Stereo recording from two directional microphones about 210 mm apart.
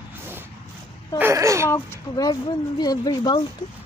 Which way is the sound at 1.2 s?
15° right (ahead or behind).